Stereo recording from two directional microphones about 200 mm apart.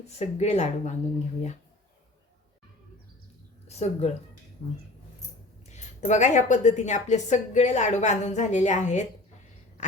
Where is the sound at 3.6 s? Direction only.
30° left (ahead or behind).